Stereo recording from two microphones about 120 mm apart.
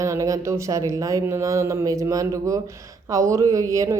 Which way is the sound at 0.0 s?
25° right (ahead or behind).